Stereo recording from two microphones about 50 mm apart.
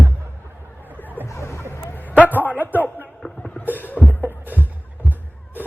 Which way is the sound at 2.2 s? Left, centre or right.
Right.